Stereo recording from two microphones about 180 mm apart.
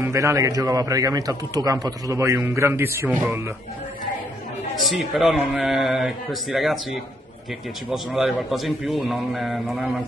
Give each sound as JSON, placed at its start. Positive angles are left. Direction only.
{"t": 0.0, "sound": "speech", "side_deg": -15}
{"t": 4.8, "sound": "a man's voice", "side_deg": 0}
{"t": 7.9, "sound": "a man's voice", "side_deg": 0}